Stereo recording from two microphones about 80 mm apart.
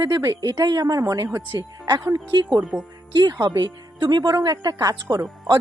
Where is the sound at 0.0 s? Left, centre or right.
Right.